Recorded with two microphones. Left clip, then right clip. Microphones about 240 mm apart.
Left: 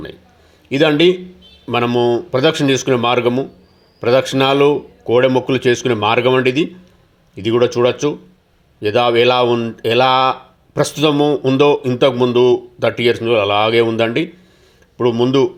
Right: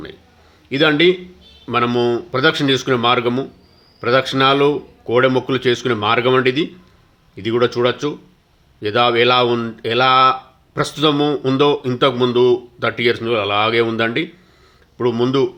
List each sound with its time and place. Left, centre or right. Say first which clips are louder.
0.7 s speech: left 1 dB; centre